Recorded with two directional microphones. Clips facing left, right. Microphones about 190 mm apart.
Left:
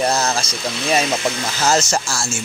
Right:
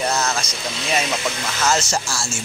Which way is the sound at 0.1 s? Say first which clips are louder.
Left 3 dB; 35° left (ahead or behind).